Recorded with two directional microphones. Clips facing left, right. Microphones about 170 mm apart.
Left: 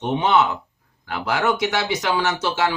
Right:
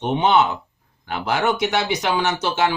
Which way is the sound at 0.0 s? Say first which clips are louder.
Right 1 dB; 20° right (ahead or behind).